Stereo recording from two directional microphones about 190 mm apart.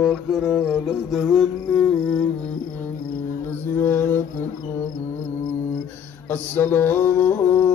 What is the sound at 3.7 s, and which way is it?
Mantra, 10° left (ahead or behind).